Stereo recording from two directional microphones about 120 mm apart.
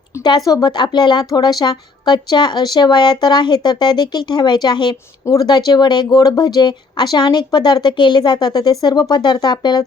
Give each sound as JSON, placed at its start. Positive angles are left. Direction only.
{"t": 0.3, "sound": "speech", "side_deg": 35}